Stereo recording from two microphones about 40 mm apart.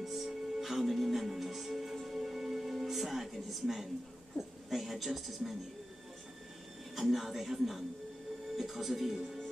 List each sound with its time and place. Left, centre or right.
0.0 s music: centre
4.6 s a woman's voice: centre
7.0 s speech: centre